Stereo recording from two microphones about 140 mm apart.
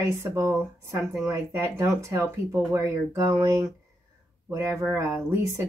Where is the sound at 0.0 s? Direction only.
20° right (ahead or behind).